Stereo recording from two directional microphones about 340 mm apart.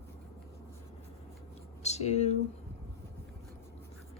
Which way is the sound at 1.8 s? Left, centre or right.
Centre.